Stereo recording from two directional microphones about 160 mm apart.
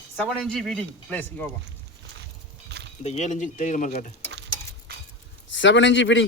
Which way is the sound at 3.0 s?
45° left (ahead or behind).